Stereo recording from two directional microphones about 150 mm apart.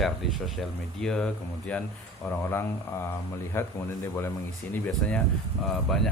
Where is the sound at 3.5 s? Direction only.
15° left (ahead or behind).